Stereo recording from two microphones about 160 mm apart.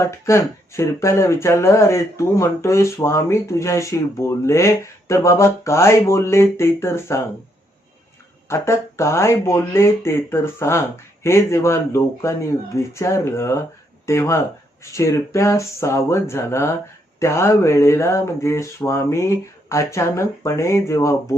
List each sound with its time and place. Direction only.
0.0 s speech: 20° left (ahead or behind)
8.4 s speech: 15° left (ahead or behind)